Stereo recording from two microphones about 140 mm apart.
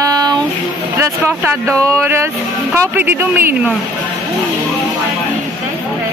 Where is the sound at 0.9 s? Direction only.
20° right (ahead or behind).